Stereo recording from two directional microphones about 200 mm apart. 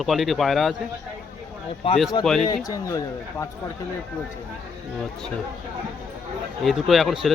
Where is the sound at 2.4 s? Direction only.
15° left (ahead or behind).